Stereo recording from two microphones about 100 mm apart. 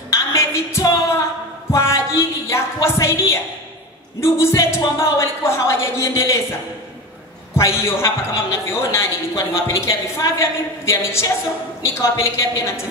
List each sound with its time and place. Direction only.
0.1 s a sound: 30° left (ahead or behind)
4.2 s a woman's voice: 25° left (ahead or behind)
7.5 s a woman's voice: 30° left (ahead or behind)